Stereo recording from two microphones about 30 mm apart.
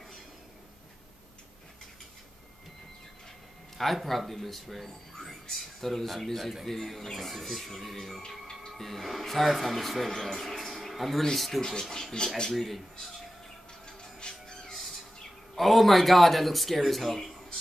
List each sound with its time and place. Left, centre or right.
3.7 s speech: centre
10.2 s a sound: centre
11.3 s speech: centre
11.6 s speech: centre
12.5 s speech: centre
13.8 s music: left
15.5 s speech: centre